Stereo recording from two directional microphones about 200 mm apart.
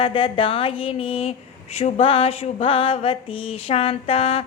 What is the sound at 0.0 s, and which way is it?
Speech, 25° left (ahead or behind).